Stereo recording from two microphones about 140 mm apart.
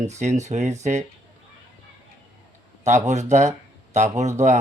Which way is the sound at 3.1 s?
55° right (ahead or behind).